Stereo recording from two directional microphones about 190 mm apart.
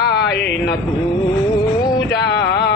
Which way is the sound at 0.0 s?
60° left (ahead or behind).